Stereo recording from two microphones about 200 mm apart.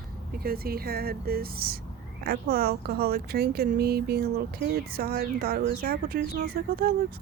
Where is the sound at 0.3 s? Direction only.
50° right (ahead or behind).